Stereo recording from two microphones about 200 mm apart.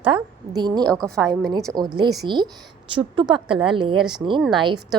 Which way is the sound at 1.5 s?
15° right (ahead or behind).